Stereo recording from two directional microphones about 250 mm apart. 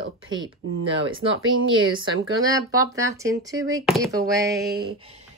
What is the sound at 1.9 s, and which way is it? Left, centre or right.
Speech, centre.